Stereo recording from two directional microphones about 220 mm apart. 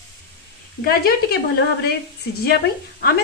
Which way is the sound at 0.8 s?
45° left (ahead or behind).